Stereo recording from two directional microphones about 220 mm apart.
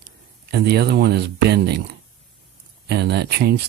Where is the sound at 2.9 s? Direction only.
50° right (ahead or behind).